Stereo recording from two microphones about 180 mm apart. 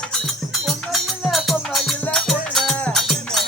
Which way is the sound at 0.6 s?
Centre (ahead or behind).